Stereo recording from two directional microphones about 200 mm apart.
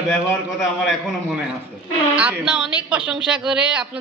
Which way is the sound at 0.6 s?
5° right (ahead or behind).